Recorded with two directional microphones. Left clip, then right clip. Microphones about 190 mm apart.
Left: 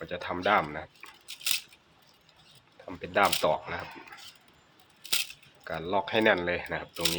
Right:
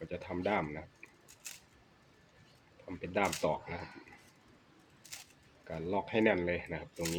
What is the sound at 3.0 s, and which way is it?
Speech, 40° left (ahead or behind).